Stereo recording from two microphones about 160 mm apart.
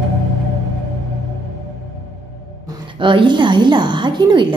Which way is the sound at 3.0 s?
30° right (ahead or behind).